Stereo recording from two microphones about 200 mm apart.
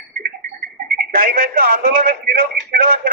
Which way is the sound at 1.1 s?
45° right (ahead or behind).